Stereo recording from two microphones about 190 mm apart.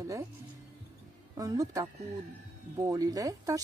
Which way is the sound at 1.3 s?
20° right (ahead or behind).